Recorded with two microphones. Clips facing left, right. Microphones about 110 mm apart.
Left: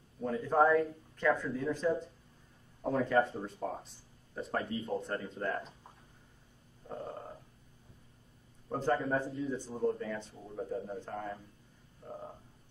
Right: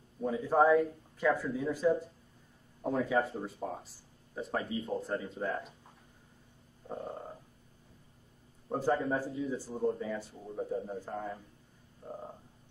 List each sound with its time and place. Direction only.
0.2 s speech: 10° right (ahead or behind)
8.6 s speech: 10° right (ahead or behind)